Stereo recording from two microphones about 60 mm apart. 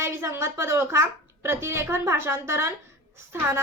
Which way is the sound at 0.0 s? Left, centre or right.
Right.